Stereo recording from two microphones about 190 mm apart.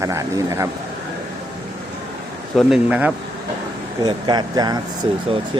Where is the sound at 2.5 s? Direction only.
5° right (ahead or behind).